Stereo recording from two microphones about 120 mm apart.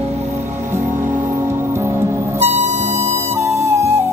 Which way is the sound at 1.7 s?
20° right (ahead or behind).